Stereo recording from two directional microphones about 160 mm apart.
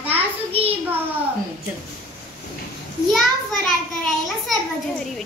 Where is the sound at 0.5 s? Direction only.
40° right (ahead or behind).